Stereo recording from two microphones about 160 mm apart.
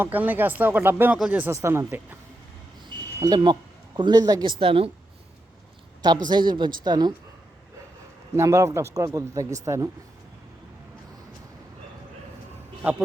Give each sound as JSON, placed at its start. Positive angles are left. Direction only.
{"t": 0.0, "sound": "speech", "side_deg": -10}
{"t": 3.2, "sound": "speech", "side_deg": -25}
{"t": 4.6, "sound": "a woman's voice", "side_deg": -35}
{"t": 6.2, "sound": "speech", "side_deg": -25}
{"t": 8.4, "sound": "speech", "side_deg": -20}